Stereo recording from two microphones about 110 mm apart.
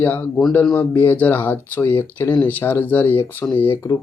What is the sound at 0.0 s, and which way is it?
Speech, 20° left (ahead or behind).